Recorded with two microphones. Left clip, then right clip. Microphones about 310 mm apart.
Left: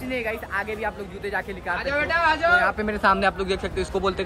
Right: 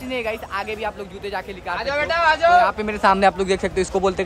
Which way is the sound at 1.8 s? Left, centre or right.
Right.